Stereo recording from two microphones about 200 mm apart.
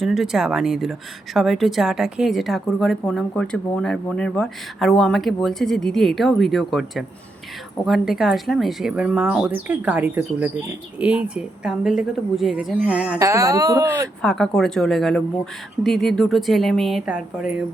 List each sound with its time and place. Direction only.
0.0 s speech: centre (ahead or behind)
14.2 s speech: 5° left (ahead or behind)